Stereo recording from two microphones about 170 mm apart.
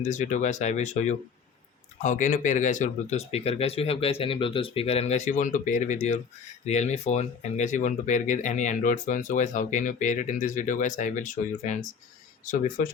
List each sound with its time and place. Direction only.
0.0 s speech: 45° left (ahead or behind)